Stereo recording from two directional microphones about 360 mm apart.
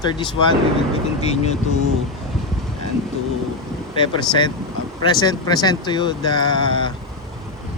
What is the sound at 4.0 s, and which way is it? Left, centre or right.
Speech, centre.